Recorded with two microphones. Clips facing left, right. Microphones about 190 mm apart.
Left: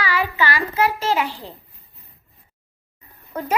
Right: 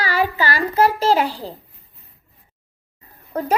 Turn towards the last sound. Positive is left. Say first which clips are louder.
# right 4 dB
turn(degrees=-35)  # may be behind; listen again after turning